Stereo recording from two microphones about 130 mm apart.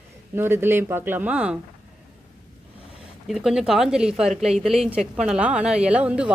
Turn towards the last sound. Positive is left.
turn(degrees=-10)  # may be behind; listen again after turning